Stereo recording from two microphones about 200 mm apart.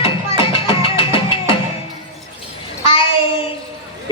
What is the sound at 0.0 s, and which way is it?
Music, 30° left (ahead or behind).